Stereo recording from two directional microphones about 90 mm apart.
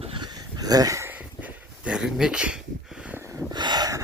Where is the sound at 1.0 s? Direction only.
15° right (ahead or behind).